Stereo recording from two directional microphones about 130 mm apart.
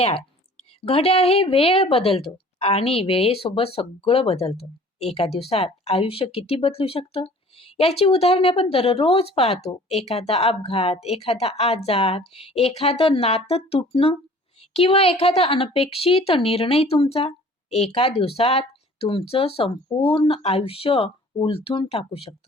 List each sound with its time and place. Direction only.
0.9 s speech: 50° left (ahead or behind)